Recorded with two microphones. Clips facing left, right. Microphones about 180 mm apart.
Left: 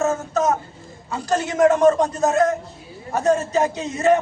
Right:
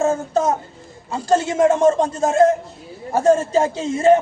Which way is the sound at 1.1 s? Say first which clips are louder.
Right 4 dB; 25° right (ahead or behind).